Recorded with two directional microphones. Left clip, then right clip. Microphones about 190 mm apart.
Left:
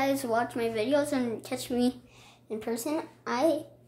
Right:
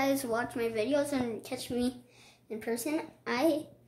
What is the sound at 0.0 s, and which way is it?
A woman's voice, centre (ahead or behind).